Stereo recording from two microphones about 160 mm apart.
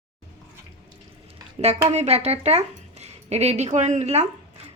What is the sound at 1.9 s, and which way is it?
Speech, 45° right (ahead or behind).